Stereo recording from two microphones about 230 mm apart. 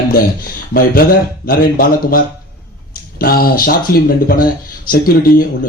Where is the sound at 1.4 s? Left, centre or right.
Left.